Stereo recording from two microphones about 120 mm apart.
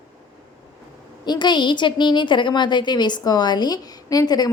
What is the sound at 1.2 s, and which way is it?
A woman's voice, 35° left (ahead or behind).